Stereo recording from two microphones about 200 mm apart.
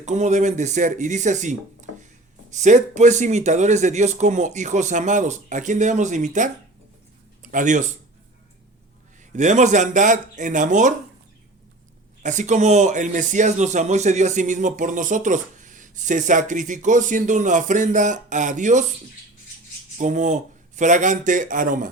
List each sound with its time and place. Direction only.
0.0 s speech: 35° right (ahead or behind)
9.3 s speech: 35° right (ahead or behind)
12.2 s speech: 40° right (ahead or behind)
20.0 s speech: 40° right (ahead or behind)